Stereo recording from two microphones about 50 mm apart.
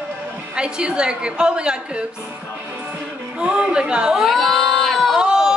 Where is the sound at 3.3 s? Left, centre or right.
Right.